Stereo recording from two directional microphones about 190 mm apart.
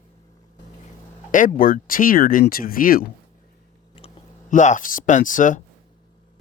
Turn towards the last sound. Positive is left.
turn(degrees=40)  # may be behind; listen again after turning